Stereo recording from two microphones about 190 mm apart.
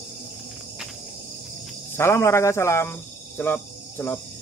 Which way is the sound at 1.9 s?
15° left (ahead or behind).